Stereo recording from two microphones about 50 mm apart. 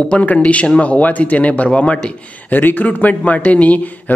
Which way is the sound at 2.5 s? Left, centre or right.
Left.